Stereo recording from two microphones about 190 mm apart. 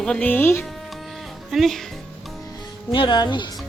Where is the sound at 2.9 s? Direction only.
25° left (ahead or behind).